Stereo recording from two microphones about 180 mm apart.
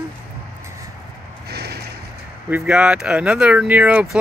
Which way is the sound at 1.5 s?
60° right (ahead or behind).